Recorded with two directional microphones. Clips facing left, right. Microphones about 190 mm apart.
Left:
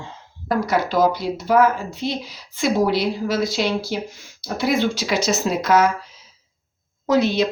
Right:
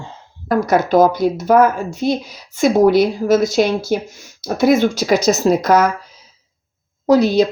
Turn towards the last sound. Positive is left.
turn(degrees=-40)  # may be behind; listen again after turning